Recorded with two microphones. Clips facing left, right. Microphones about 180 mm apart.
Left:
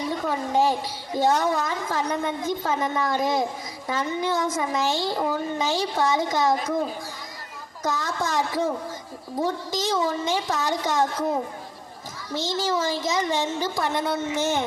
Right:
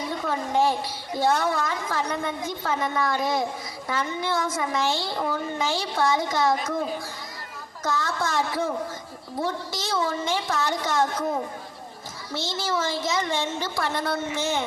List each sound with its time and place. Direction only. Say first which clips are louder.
0.3 s a woman's voice: even; 15° left (ahead or behind)
7.9 s a woman's voice: even; 15° left (ahead or behind)
12.3 s a woman's voice: left 3 dB; 15° left (ahead or behind)